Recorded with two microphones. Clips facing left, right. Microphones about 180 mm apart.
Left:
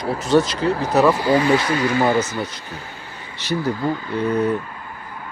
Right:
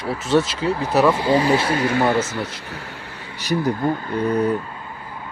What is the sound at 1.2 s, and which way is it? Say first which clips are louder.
Speech: left 1 dB; 30° right (ahead or behind).